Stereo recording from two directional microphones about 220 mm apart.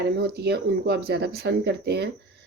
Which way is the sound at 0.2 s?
50° right (ahead or behind).